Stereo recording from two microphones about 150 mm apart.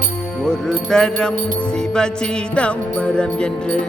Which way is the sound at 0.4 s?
5° left (ahead or behind).